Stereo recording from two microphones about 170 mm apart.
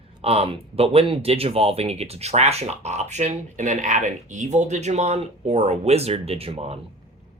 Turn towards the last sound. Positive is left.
turn(degrees=-35)  # may be behind; listen again after turning